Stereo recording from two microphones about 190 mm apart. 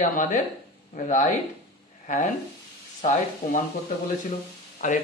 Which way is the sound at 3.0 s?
40° left (ahead or behind).